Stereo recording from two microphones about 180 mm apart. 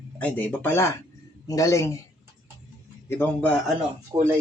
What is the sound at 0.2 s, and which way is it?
Speech, 10° left (ahead or behind).